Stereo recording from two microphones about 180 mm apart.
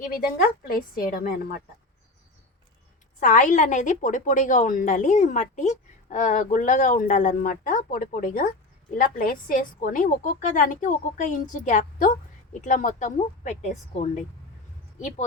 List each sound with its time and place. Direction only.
0.7 s a woman's voice: 55° left (ahead or behind)
3.2 s a woman's voice: 45° left (ahead or behind)